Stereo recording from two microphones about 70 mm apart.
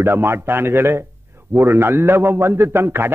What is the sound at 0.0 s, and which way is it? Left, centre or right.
A man's voice, right.